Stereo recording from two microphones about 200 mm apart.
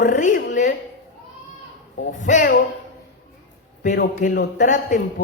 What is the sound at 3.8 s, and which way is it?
A man's voice, 40° left (ahead or behind).